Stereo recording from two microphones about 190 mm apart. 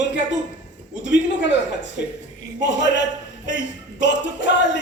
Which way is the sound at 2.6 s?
70° left (ahead or behind).